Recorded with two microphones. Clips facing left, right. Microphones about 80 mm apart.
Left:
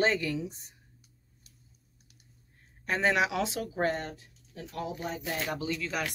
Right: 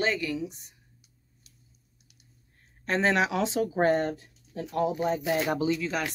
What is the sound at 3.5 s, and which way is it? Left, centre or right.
Speech, right.